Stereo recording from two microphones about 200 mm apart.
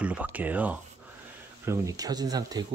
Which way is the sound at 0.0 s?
10° right (ahead or behind).